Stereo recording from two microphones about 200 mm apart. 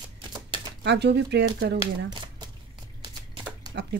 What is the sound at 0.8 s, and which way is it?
Speech, 55° right (ahead or behind).